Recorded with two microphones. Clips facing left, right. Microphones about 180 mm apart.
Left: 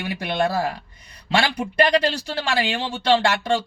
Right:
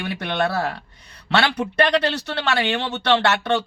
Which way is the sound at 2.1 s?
65° right (ahead or behind).